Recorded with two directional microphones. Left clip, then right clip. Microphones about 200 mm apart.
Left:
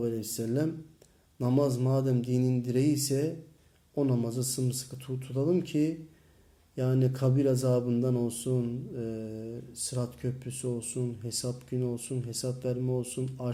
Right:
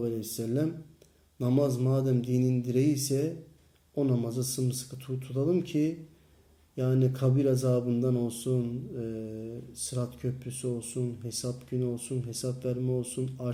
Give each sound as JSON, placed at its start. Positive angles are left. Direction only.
{"t": 0.0, "sound": "a man's voice", "side_deg": 10}